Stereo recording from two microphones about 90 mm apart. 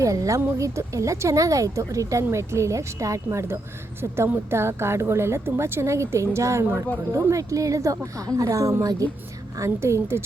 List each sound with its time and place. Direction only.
0.0 s a woman's voice: 35° right (ahead or behind)